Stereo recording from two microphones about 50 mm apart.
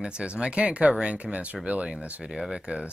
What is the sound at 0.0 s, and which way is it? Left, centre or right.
Speech, centre.